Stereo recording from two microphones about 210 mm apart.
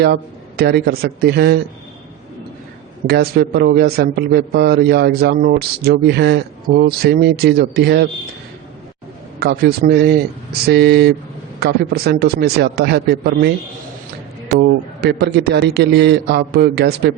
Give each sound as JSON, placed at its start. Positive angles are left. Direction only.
{"t": 0.0, "sound": "a man's voice", "side_deg": -50}
{"t": 3.1, "sound": "a man's voice", "side_deg": -45}
{"t": 9.4, "sound": "a man's voice", "side_deg": -50}
{"t": 14.5, "sound": "a man's voice", "side_deg": -50}